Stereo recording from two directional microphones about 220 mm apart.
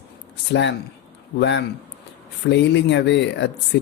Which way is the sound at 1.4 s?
50° left (ahead or behind).